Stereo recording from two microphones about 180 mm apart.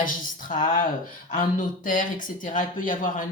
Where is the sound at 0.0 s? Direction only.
50° left (ahead or behind).